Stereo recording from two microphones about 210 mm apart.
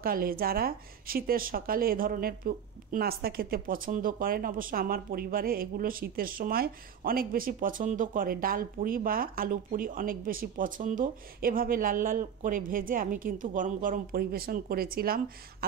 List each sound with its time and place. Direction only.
0.0 s speech: 45° right (ahead or behind)